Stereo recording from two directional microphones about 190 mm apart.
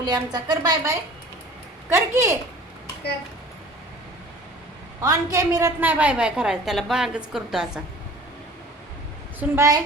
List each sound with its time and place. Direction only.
0.0 s a woman's voice: 20° right (ahead or behind)
4.9 s a woman's voice: 15° right (ahead or behind)
9.4 s a woman's voice: 15° right (ahead or behind)